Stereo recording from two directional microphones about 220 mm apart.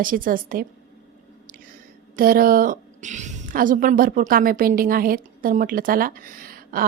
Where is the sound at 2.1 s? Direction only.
40° right (ahead or behind).